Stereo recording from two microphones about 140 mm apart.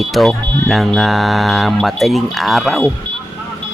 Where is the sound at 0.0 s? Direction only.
Centre (ahead or behind).